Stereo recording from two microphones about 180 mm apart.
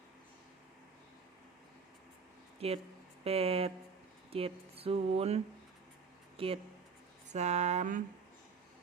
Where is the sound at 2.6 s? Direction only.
35° right (ahead or behind).